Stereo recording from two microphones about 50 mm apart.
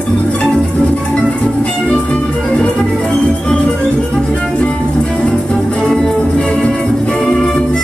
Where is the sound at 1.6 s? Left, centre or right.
Left; by 6.1 s centre.